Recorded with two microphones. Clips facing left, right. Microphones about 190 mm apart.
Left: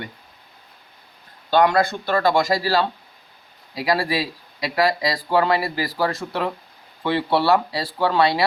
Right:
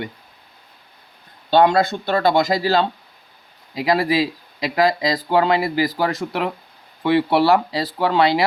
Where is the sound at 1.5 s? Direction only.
25° right (ahead or behind).